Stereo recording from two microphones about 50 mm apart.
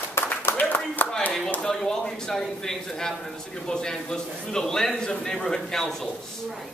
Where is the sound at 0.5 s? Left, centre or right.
Left.